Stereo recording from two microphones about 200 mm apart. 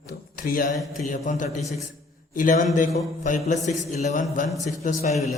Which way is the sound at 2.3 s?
40° left (ahead or behind).